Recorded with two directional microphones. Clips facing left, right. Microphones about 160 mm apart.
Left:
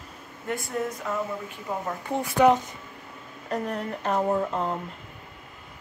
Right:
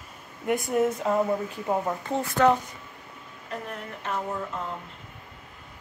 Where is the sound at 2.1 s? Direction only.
15° left (ahead or behind).